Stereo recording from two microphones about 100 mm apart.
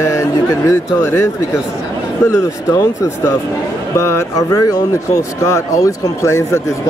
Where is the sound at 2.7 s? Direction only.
35° left (ahead or behind).